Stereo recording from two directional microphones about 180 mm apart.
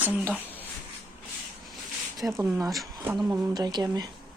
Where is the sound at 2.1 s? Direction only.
20° right (ahead or behind).